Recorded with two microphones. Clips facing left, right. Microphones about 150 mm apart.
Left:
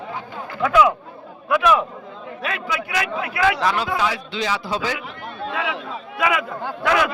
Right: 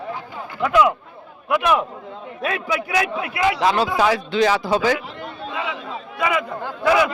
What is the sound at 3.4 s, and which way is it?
Speech, 20° right (ahead or behind).